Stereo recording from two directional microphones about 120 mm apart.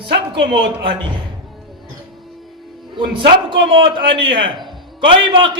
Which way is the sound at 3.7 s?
45° right (ahead or behind).